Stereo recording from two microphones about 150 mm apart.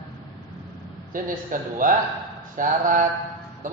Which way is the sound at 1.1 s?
65° right (ahead or behind).